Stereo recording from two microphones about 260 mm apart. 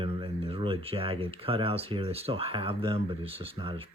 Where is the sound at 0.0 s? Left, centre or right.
Right.